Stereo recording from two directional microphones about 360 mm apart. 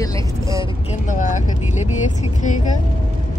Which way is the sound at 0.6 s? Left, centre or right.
Centre.